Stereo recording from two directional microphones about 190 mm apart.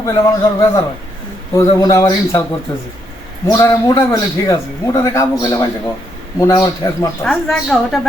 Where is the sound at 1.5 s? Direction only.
20° left (ahead or behind).